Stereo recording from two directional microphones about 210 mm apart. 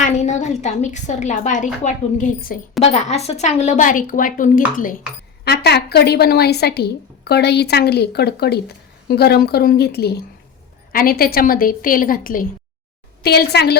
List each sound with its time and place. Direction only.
0.0 s a woman's voice: 35° left (ahead or behind)
5.5 s a woman's voice: 50° left (ahead or behind)